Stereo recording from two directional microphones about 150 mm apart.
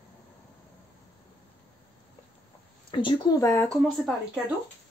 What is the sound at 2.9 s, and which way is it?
Speech, 35° left (ahead or behind).